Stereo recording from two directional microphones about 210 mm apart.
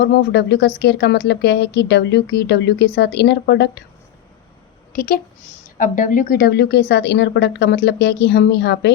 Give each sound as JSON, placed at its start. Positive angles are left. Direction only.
{"t": 0.0, "sound": "speech", "side_deg": 55}
{"t": 4.9, "sound": "a woman's voice", "side_deg": 45}